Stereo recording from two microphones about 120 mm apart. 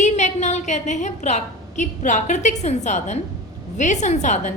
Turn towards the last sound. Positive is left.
turn(degrees=75)  # may be behind; listen again after turning